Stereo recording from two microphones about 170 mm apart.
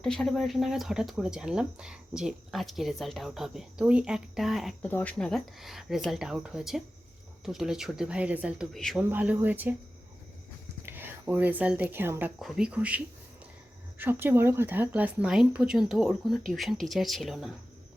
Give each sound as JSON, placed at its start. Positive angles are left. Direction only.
{"t": 0.0, "sound": "speech", "side_deg": 0}
{"t": 4.9, "sound": "speech", "side_deg": 10}
{"t": 9.0, "sound": "speech", "side_deg": -10}
{"t": 10.8, "sound": "speech", "side_deg": -10}
{"t": 12.4, "sound": "speech", "side_deg": -5}
{"t": 14.0, "sound": "speech", "side_deg": -10}